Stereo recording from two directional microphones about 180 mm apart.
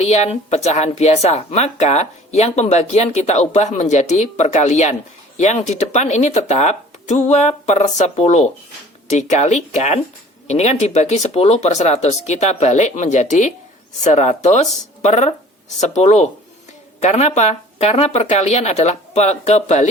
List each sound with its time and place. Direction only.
0.0 s speech: 40° left (ahead or behind)